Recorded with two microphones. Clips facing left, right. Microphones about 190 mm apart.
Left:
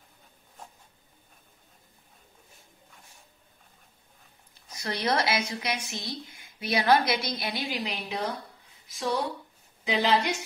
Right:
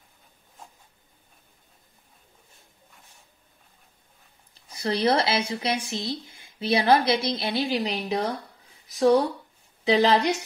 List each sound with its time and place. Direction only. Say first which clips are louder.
4.6 s a woman's voice: right 6 dB; 30° right (ahead or behind)